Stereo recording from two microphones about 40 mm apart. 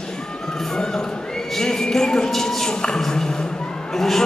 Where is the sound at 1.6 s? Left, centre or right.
Centre.